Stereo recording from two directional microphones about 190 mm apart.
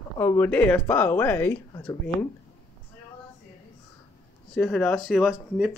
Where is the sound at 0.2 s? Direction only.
10° left (ahead or behind).